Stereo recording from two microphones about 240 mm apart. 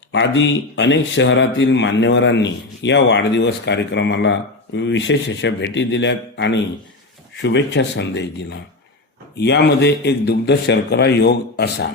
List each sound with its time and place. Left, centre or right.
0.1 s speech: left